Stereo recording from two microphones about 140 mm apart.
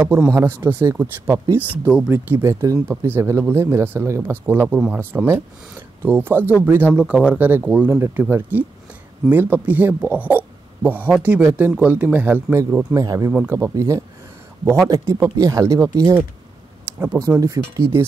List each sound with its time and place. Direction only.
0.3 s speech: 20° right (ahead or behind)
2.3 s speech: 20° right (ahead or behind)
13.3 s speech: 5° right (ahead or behind)
13.6 s speech: 20° right (ahead or behind)